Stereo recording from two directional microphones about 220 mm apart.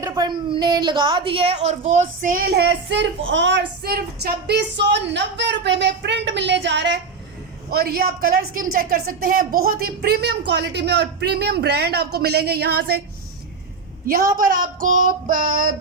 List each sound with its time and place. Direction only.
0.0 s a woman's voice: 15° right (ahead or behind)
1.9 s child singing: 35° right (ahead or behind)
2.6 s speech: 55° right (ahead or behind)
14.3 s child singing: 40° right (ahead or behind)